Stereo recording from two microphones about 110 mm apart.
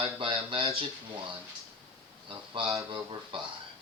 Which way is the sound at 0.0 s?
55° right (ahead or behind).